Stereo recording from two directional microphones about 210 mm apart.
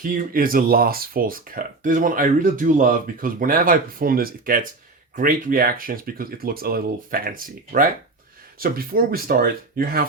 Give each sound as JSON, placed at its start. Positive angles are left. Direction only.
{"t": 0.0, "sound": "speech", "side_deg": -40}